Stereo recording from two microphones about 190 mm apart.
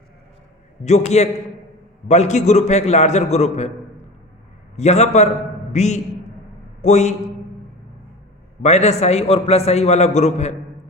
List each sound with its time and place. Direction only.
0.9 s a man's voice: 35° left (ahead or behind)
4.8 s a man's voice: 35° left (ahead or behind)
8.6 s a man's voice: 35° left (ahead or behind)